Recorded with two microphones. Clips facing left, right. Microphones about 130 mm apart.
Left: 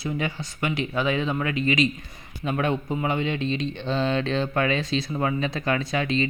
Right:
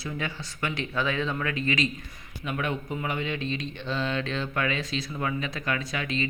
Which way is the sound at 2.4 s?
30° left (ahead or behind).